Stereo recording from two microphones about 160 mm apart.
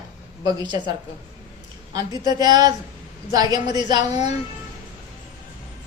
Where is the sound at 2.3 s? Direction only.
25° right (ahead or behind).